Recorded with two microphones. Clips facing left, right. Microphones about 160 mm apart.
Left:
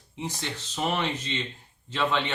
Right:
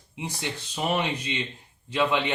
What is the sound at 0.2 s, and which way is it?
Speech, 10° right (ahead or behind).